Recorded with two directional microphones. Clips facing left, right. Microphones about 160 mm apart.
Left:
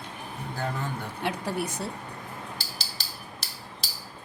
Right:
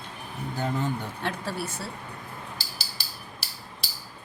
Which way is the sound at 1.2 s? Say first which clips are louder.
Left 4 dB; 15° left (ahead or behind).